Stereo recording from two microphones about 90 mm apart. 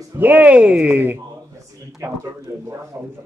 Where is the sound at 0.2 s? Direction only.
20° right (ahead or behind).